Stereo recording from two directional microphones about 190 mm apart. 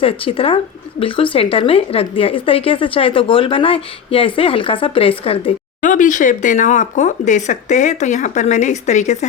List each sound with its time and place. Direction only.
0.0 s speech: 30° left (ahead or behind)
5.9 s speech: 40° left (ahead or behind)